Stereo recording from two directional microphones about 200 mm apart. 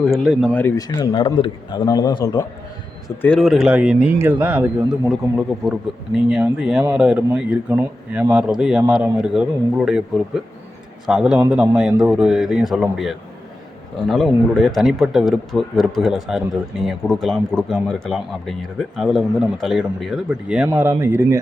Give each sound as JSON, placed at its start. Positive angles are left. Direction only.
{"t": 0.0, "sound": "a man's voice", "side_deg": 0}
{"t": 0.6, "sound": "a man's voice", "side_deg": 20}
{"t": 3.2, "sound": "a man's voice", "side_deg": 5}